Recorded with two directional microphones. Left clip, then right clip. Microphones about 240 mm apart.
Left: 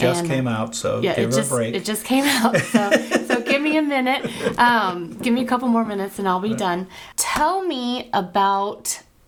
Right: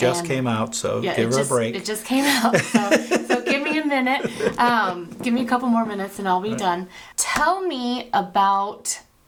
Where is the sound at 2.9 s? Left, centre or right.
Right.